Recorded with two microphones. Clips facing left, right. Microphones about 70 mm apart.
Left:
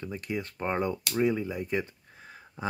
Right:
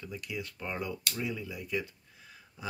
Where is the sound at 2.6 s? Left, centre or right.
Left.